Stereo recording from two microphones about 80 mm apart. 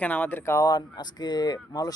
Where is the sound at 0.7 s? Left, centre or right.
Left.